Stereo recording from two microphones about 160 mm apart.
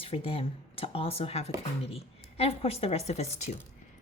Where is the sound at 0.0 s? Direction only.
35° left (ahead or behind).